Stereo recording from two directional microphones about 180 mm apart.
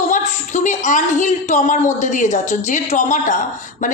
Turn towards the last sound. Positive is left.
turn(degrees=45)  # may be behind; listen again after turning